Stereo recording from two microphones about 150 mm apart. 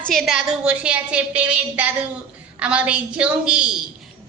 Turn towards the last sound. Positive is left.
turn(degrees=-5)  # may be behind; listen again after turning